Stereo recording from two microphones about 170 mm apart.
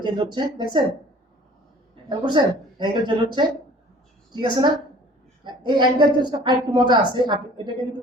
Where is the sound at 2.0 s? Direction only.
25° right (ahead or behind).